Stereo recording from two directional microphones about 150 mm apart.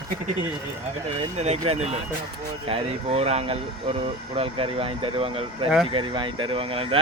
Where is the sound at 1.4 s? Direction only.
45° right (ahead or behind).